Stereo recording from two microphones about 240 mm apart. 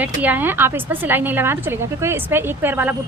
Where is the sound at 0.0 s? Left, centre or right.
Centre.